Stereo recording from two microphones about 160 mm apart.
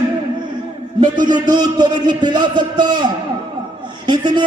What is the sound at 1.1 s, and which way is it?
A man's voice, 25° right (ahead or behind).